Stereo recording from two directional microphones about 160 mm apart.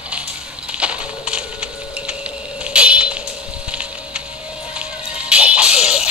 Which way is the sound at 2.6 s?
5° right (ahead or behind).